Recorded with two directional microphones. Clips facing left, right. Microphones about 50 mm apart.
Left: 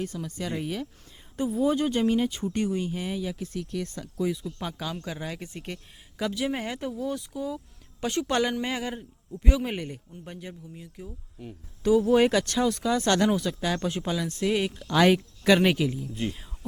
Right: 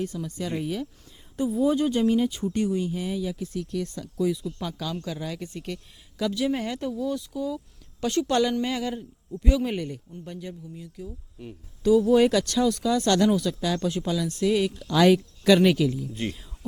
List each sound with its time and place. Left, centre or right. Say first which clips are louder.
0.0 s speech: right 2 dB; left
4.6 s speech: right 2 dB; left